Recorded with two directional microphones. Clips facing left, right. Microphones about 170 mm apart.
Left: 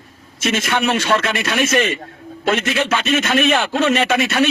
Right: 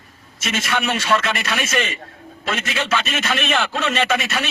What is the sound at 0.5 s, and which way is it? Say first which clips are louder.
A man's voice: left 3 dB; 40° left (ahead or behind).